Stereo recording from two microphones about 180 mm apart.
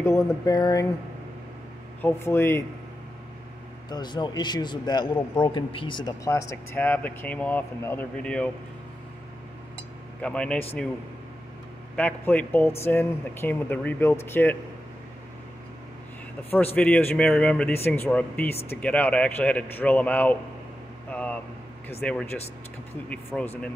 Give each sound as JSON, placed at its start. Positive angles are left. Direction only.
{"t": 0.0, "sound": "a man's voice", "side_deg": 20}
{"t": 2.0, "sound": "speech", "side_deg": 10}
{"t": 3.9, "sound": "a man's voice", "side_deg": 25}
{"t": 10.2, "sound": "speech", "side_deg": 5}
{"t": 11.9, "sound": "speech", "side_deg": 5}
{"t": 16.4, "sound": "speech", "side_deg": 10}
{"t": 21.1, "sound": "a sound", "side_deg": 10}
{"t": 22.0, "sound": "speech", "side_deg": 10}